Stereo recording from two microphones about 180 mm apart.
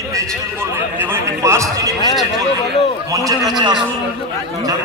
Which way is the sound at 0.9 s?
15° right (ahead or behind).